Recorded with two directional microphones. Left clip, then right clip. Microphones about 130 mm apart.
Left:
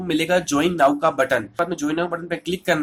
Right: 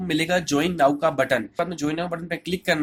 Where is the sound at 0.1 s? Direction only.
30° right (ahead or behind).